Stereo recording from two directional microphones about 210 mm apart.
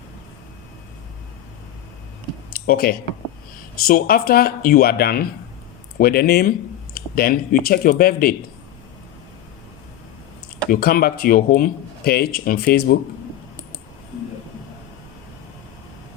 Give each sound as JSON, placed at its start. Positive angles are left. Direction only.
{"t": 2.5, "sound": "a sound", "side_deg": 45}
{"t": 3.8, "sound": "speech", "side_deg": 45}
{"t": 10.7, "sound": "speech", "side_deg": 45}